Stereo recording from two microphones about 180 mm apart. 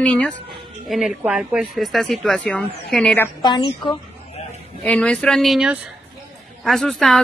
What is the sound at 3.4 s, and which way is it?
Speech, 25° left (ahead or behind).